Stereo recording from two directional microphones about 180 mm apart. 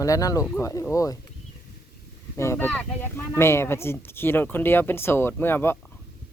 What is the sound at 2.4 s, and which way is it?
Speech, 15° left (ahead or behind).